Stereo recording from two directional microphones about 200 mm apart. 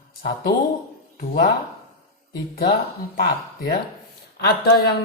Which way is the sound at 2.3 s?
55° left (ahead or behind).